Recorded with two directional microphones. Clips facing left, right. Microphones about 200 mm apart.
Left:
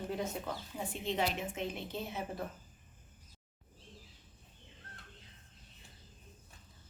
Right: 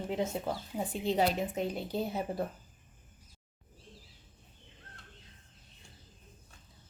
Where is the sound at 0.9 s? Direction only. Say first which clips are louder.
Right 6 dB; 35° right (ahead or behind).